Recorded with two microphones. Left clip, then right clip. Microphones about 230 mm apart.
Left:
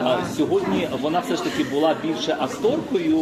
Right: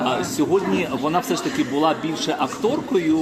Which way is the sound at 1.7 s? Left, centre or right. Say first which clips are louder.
Even; right.